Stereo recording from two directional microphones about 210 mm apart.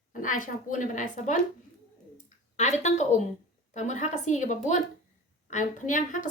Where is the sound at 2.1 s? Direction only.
35° left (ahead or behind).